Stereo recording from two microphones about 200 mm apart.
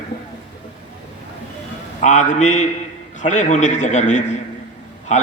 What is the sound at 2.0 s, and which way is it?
A man's voice, 35° left (ahead or behind).